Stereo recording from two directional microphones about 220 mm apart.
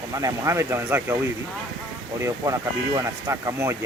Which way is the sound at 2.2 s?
15° right (ahead or behind).